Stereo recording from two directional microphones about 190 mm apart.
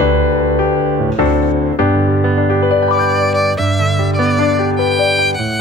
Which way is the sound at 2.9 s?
Centre (ahead or behind).